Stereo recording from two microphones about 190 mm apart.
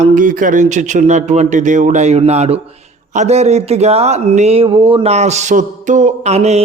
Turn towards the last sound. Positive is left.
turn(degrees=-35)  # may be behind; listen again after turning